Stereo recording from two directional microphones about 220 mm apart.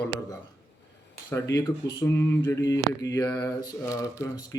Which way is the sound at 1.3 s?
15° left (ahead or behind).